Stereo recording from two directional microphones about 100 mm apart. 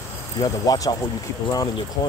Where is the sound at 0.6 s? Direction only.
35° left (ahead or behind).